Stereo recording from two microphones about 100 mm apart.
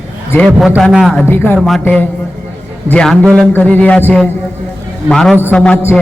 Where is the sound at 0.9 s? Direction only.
5° right (ahead or behind).